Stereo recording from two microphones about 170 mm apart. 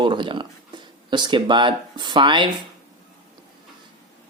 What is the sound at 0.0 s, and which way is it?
Speech, 30° right (ahead or behind).